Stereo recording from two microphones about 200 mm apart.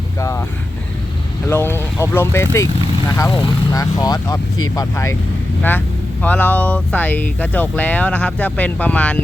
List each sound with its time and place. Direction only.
0.2 s speech: 15° left (ahead or behind)
1.5 s speech: 10° left (ahead or behind)
6.2 s speech: 10° left (ahead or behind)